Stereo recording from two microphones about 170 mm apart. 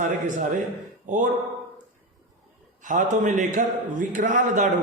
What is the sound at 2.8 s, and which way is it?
A man's voice, 50° right (ahead or behind).